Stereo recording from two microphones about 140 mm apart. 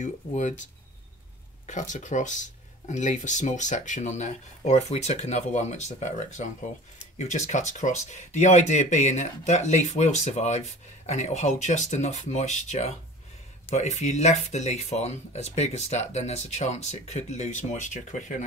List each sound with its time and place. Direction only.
0.0 s speech: 60° left (ahead or behind)
1.7 s speech: 60° left (ahead or behind)